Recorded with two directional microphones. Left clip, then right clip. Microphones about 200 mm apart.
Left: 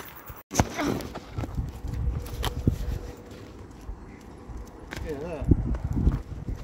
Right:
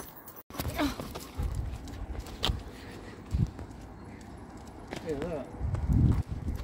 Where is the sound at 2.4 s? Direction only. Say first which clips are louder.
Right 1 dB; 35° left (ahead or behind).